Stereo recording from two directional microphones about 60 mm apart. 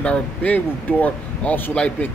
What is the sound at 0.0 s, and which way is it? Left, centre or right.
Speech, left.